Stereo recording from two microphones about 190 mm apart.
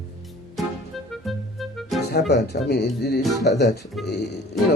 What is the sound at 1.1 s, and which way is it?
Music, centre (ahead or behind).